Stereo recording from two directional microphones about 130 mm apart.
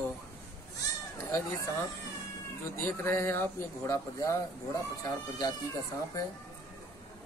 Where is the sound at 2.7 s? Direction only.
20° left (ahead or behind).